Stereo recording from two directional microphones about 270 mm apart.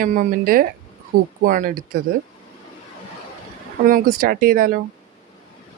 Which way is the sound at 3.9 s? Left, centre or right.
Right.